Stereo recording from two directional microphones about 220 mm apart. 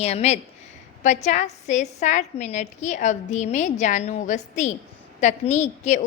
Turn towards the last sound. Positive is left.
turn(degrees=30)  # may be behind; listen again after turning